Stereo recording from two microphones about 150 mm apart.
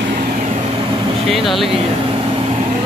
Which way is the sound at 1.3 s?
Centre (ahead or behind).